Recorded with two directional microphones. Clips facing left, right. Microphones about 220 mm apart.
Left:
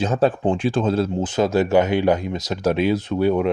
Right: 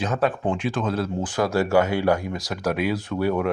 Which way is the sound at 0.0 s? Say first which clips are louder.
Left 4 dB; 30° left (ahead or behind).